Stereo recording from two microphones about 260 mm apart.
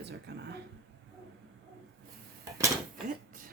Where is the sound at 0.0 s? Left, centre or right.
Right.